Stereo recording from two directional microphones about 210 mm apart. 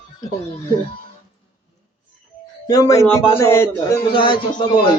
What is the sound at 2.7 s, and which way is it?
Speech, 15° left (ahead or behind).